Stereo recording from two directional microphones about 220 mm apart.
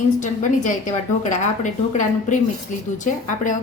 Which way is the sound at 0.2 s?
35° left (ahead or behind).